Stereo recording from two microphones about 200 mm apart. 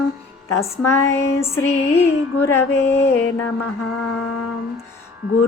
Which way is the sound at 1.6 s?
30° left (ahead or behind).